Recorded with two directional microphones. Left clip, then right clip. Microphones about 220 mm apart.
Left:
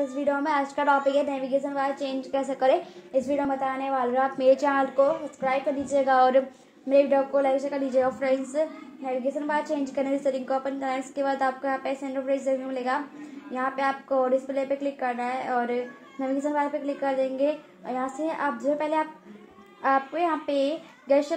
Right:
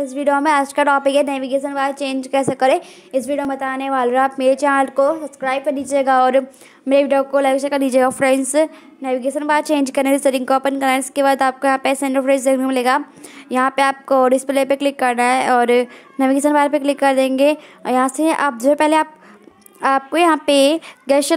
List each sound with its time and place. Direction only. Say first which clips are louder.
0.2 s a woman's voice: right 11 dB; 45° right (ahead or behind)
3.1 s a woman's voice: right 5 dB; 45° right (ahead or behind); by 4.8 s 25° right (ahead or behind)
4.9 s a woman's voice: right 6 dB; 45° right (ahead or behind)
6.9 s a woman's voice: right 6 dB; 45° right (ahead or behind)